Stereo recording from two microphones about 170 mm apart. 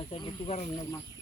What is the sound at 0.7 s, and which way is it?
Speech, 25° left (ahead or behind).